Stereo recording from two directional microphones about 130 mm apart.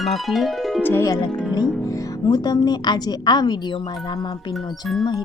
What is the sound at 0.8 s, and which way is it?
A woman's voice, 20° left (ahead or behind).